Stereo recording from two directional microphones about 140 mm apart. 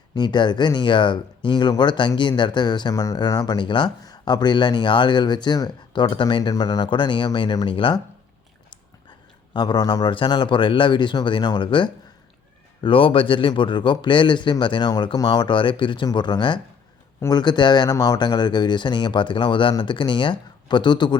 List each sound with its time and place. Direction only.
0.1 s speech: 30° left (ahead or behind)